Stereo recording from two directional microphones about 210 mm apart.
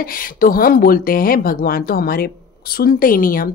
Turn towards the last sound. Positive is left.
turn(degrees=40)  # may be behind; listen again after turning